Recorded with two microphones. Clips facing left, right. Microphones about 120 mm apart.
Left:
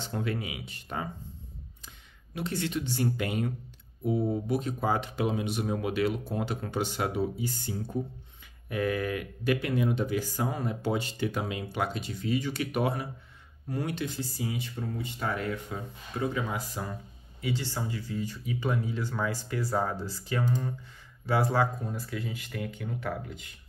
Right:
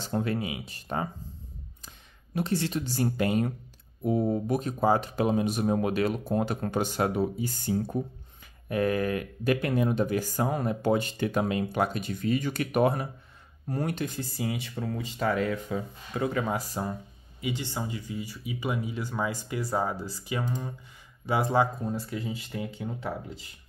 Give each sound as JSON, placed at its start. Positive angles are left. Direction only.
{"t": 0.0, "sound": "speech", "side_deg": -35}
{"t": 2.3, "sound": "speech", "side_deg": -35}
{"t": 14.5, "sound": "speech", "side_deg": -75}
{"t": 16.2, "sound": "speech", "side_deg": -60}
{"t": 16.5, "sound": "speech", "side_deg": -35}
{"t": 17.4, "sound": "speech", "side_deg": -15}